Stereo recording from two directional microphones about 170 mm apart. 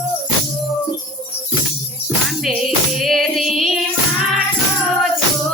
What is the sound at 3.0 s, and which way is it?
Music, centre (ahead or behind).